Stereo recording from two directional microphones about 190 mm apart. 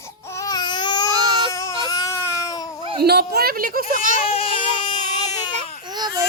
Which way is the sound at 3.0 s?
55° right (ahead or behind).